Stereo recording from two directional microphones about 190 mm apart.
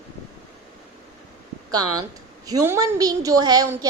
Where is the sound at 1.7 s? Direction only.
20° right (ahead or behind).